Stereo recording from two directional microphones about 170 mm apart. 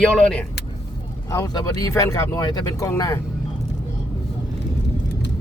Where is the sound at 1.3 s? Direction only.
15° left (ahead or behind).